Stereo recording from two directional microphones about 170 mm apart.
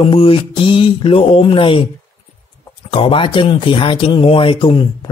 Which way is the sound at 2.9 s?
30° left (ahead or behind).